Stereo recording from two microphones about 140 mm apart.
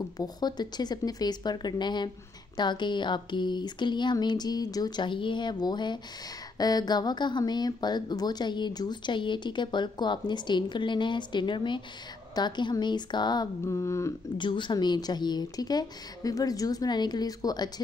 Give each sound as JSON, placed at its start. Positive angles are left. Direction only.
{"t": 0.2, "sound": "a woman's voice", "side_deg": 30}
{"t": 14.4, "sound": "a woman's voice", "side_deg": 35}